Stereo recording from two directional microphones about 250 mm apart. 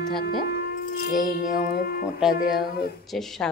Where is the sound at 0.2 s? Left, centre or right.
Left.